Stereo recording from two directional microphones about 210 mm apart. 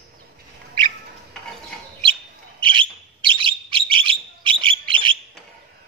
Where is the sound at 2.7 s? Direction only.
25° right (ahead or behind).